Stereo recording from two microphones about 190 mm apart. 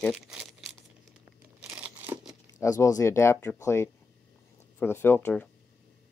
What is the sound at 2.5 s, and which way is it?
Speech, 15° left (ahead or behind).